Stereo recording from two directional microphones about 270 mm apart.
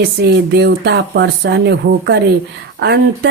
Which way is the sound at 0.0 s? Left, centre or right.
Right.